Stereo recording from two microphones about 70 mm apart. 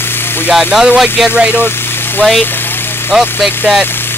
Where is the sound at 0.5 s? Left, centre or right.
Centre.